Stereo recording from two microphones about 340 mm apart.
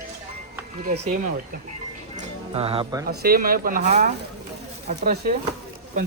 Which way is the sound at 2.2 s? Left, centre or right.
Centre.